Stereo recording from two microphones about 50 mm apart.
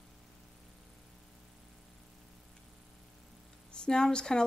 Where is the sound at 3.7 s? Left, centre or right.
Centre.